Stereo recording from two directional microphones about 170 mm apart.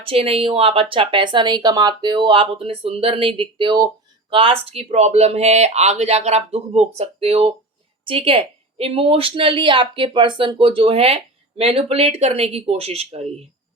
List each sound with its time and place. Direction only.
0.0 s a woman's voice: 35° right (ahead or behind)